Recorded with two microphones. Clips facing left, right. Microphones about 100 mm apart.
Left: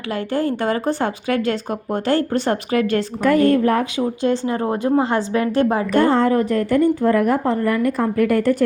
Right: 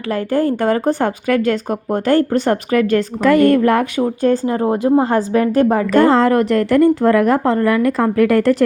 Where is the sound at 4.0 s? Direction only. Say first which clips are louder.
Right 4 dB; 45° right (ahead or behind).